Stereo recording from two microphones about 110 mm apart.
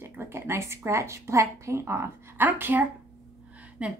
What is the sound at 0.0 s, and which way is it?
A woman's voice, 20° right (ahead or behind).